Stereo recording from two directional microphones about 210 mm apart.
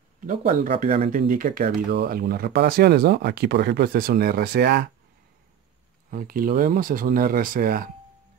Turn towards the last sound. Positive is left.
turn(degrees=-45)  # may be behind; listen again after turning